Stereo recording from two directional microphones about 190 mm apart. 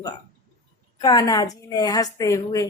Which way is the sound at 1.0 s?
20° left (ahead or behind).